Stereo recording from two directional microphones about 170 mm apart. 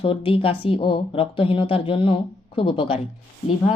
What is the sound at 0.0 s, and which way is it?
Speech, 30° left (ahead or behind).